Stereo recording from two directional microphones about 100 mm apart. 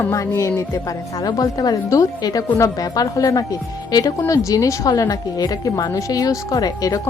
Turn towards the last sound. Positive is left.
turn(degrees=35)  # may be behind; listen again after turning